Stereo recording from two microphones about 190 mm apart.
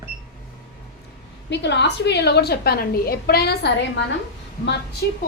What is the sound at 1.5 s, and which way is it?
A woman's voice, 65° left (ahead or behind).